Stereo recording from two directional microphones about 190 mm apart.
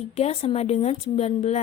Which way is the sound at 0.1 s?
35° left (ahead or behind).